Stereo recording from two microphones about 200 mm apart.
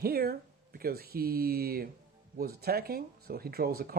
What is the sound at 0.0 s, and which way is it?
Speech, 50° right (ahead or behind).